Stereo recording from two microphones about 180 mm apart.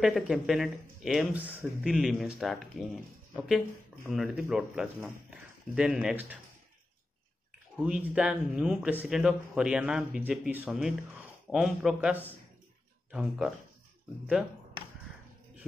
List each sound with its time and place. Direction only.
0.0 s speech: centre (ahead or behind)
7.7 s speech: 5° right (ahead or behind)